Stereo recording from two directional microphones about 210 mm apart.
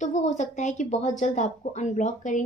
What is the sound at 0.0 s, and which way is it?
Speech, 35° left (ahead or behind).